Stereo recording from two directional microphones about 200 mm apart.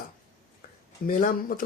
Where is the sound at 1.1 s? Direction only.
45° left (ahead or behind).